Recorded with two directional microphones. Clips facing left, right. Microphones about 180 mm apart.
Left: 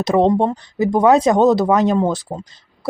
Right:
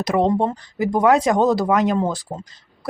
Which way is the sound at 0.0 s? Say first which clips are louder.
Left 4 dB; 25° left (ahead or behind).